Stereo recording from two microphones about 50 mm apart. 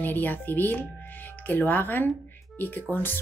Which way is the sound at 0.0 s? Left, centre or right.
Left.